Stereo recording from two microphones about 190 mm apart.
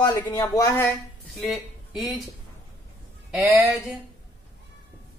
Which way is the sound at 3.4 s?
5° right (ahead or behind).